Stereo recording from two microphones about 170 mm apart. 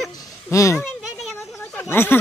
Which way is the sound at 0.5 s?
20° left (ahead or behind).